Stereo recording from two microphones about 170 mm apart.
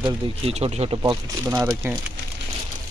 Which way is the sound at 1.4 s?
15° right (ahead or behind).